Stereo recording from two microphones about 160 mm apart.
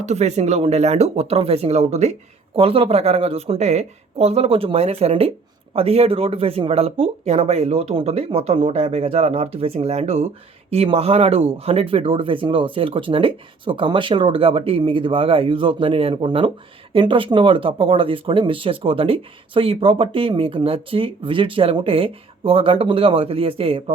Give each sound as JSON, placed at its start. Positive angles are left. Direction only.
{"t": 0.0, "sound": "speech", "side_deg": -45}